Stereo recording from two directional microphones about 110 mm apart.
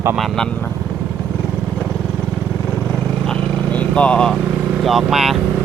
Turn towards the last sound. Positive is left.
turn(degrees=0)  # may be behind; listen again after turning